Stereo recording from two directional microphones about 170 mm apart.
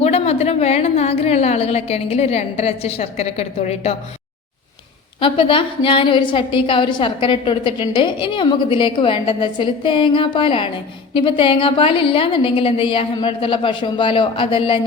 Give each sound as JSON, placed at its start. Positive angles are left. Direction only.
{"t": 0.0, "sound": "a woman's voice", "side_deg": 40}
{"t": 5.2, "sound": "a woman's voice", "side_deg": 30}